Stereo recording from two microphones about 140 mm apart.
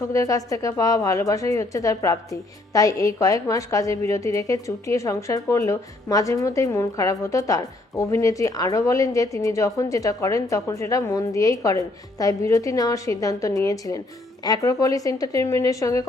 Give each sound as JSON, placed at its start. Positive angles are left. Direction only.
{"t": 0.1, "sound": "speech", "side_deg": 25}